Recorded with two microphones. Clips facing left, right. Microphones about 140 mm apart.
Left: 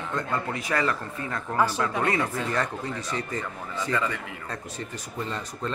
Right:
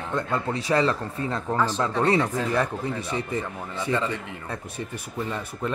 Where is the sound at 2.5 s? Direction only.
10° right (ahead or behind).